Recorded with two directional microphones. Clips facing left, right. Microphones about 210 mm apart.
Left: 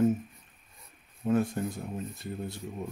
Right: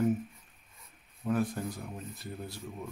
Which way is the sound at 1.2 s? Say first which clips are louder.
Left 4 dB; 25° left (ahead or behind).